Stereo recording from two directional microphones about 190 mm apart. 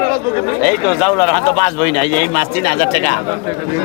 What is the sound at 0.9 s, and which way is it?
Speech, centre (ahead or behind).